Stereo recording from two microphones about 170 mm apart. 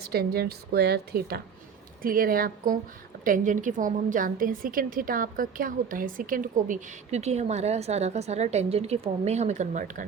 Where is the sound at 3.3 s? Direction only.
50° right (ahead or behind).